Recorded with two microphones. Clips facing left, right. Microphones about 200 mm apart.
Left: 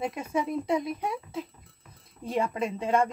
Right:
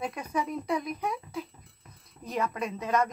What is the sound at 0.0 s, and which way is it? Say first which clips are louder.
Speech: left 2 dB; 25° left (ahead or behind).